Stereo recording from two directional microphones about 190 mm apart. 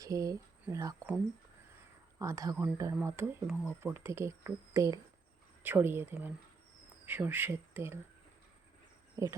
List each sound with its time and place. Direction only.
0.0 s speech: 15° right (ahead or behind)
2.1 s speech: 15° right (ahead or behind)
9.2 s speech: 15° right (ahead or behind)